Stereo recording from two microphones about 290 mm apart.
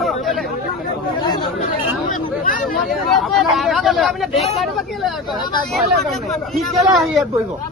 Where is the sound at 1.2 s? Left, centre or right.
Centre.